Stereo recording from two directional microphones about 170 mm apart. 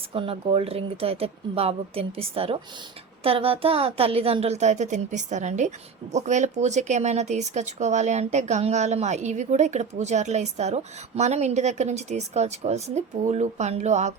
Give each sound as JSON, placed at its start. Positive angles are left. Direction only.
{"t": 0.1, "sound": "a woman's voice", "side_deg": -30}